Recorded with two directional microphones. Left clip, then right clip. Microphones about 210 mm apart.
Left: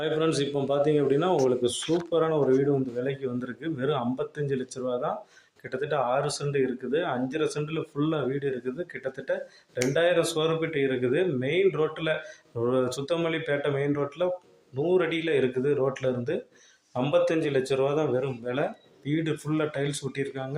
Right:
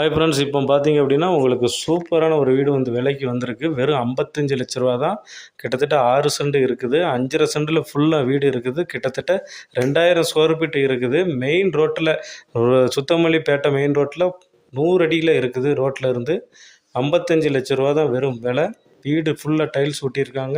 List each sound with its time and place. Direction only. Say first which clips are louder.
0.0 s speech: right 8 dB; 45° right (ahead or behind)